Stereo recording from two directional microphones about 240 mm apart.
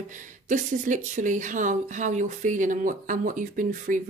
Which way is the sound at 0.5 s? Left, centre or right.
Right.